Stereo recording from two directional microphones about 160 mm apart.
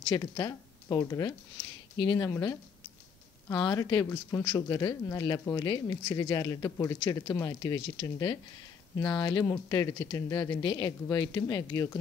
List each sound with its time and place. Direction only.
0.1 s speech: 20° left (ahead or behind)
3.5 s speech: 25° left (ahead or behind)
8.9 s speech: 10° left (ahead or behind)
9.2 s speech: 25° left (ahead or behind)